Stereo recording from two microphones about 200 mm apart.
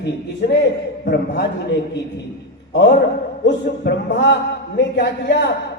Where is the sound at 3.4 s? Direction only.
55° left (ahead or behind).